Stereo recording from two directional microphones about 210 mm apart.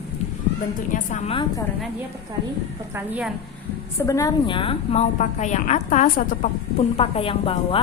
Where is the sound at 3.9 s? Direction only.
15° left (ahead or behind).